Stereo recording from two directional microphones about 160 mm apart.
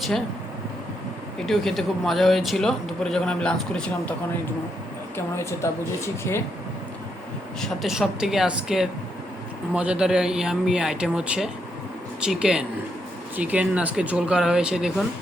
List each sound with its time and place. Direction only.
1.4 s a man's voice: centre (ahead or behind)
5.1 s a woman's voice: 15° left (ahead or behind)
7.6 s a man's voice: centre (ahead or behind)